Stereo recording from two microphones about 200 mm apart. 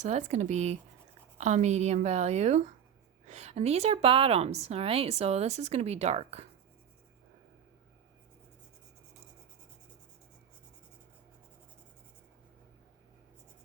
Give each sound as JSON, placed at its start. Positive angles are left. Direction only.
{"t": 0.0, "sound": "a woman's voice", "side_deg": -35}